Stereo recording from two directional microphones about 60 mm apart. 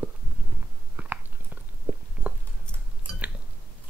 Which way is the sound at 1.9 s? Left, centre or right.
Right.